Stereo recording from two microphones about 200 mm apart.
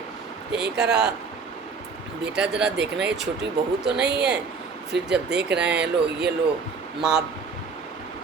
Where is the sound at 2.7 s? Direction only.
60° right (ahead or behind).